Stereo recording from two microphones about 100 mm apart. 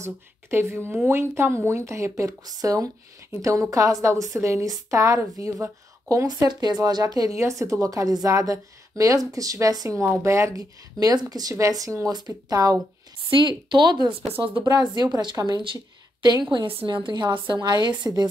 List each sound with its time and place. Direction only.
0.0 s a woman's voice: 25° right (ahead or behind)
13.3 s a woman's voice: 55° right (ahead or behind)
16.6 s a woman's voice: 60° right (ahead or behind); by 18.3 s 45° right (ahead or behind)